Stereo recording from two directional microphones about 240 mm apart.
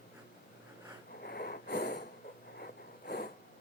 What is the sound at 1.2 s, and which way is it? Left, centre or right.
Snort, left.